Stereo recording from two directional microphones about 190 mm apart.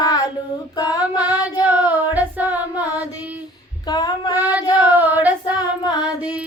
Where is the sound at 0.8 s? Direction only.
20° left (ahead or behind).